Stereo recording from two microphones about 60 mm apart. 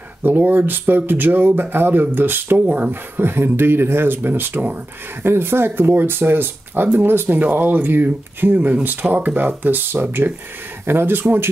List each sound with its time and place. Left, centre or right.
0.2 s speech: right